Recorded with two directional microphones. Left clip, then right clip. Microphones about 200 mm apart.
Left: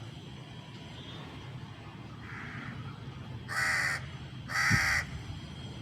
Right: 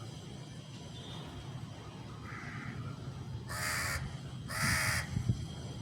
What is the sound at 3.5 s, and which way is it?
Crow, 25° left (ahead or behind).